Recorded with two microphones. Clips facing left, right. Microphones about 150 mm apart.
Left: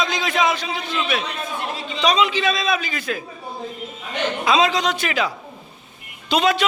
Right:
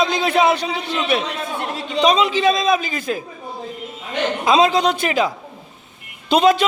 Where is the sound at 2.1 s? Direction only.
35° right (ahead or behind).